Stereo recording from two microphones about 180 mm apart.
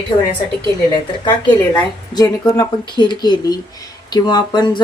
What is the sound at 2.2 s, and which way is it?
Speech, 25° left (ahead or behind).